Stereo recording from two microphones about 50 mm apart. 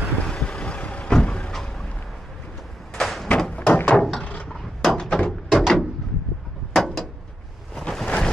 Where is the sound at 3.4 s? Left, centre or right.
Centre.